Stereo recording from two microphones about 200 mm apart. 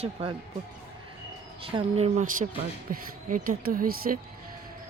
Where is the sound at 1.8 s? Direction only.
30° right (ahead or behind); by 4.1 s 45° right (ahead or behind).